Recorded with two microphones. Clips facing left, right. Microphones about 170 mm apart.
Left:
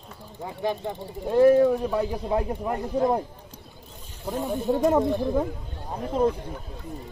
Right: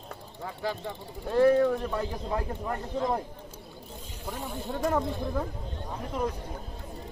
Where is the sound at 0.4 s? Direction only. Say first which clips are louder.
Left 5 dB; 20° left (ahead or behind).